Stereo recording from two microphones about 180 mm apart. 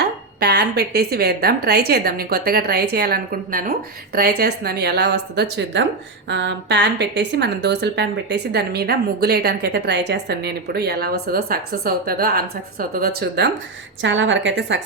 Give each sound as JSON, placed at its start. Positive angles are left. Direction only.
{"t": 0.0, "sound": "a woman's voice", "side_deg": -65}
{"t": 14.0, "sound": "a woman's voice", "side_deg": -90}